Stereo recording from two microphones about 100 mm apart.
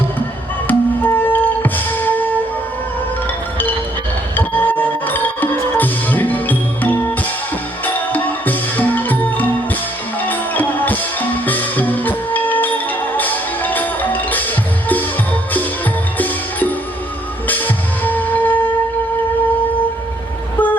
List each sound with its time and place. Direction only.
0.7 s music: 20° left (ahead or behind)
4.4 s music: 20° left (ahead or behind)
8.1 s music: 15° left (ahead or behind)